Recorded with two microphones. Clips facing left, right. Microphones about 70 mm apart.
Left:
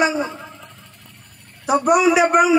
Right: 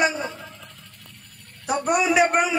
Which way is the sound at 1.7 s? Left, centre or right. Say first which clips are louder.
Left 6 dB; centre.